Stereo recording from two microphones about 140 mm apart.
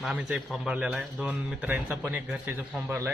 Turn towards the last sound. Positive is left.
turn(degrees=-15)  # may be behind; listen again after turning